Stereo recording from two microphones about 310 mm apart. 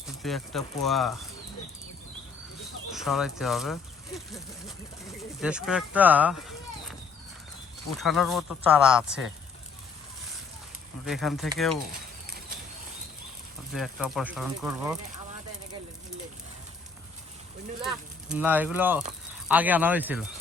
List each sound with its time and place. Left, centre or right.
0.2 s speech: centre
2.9 s speech: centre
7.9 s speech: centre
11.0 s speech: centre
13.7 s speech: centre
17.8 s speech: centre